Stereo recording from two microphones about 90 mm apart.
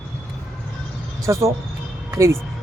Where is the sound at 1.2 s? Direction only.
35° right (ahead or behind).